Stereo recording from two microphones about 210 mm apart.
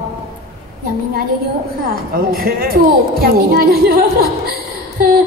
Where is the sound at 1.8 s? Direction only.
45° right (ahead or behind).